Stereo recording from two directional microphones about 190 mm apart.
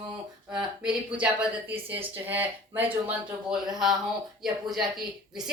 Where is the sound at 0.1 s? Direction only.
5° right (ahead or behind).